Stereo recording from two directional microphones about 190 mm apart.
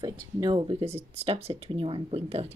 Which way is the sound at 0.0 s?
25° right (ahead or behind).